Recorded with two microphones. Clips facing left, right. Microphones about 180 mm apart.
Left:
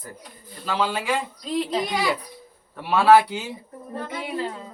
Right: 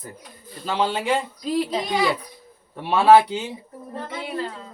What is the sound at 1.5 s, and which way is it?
Speech, 5° right (ahead or behind).